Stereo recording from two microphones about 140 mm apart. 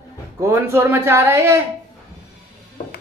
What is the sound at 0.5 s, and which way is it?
Speech, 20° right (ahead or behind).